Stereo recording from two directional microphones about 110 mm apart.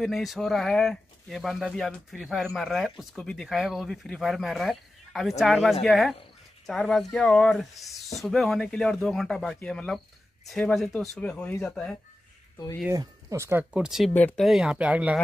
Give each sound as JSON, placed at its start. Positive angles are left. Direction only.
{"t": 0.0, "sound": "speech", "side_deg": 0}
{"t": 12.9, "sound": "speech", "side_deg": -30}
{"t": 13.6, "sound": "speech", "side_deg": -5}
{"t": 14.1, "sound": "speech", "side_deg": 15}
{"t": 14.4, "sound": "speech", "side_deg": -5}